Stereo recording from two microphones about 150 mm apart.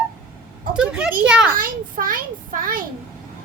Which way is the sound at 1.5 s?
70° right (ahead or behind).